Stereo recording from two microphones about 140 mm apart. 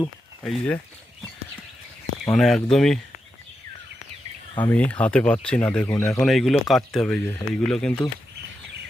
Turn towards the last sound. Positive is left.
turn(degrees=5)  # may be behind; listen again after turning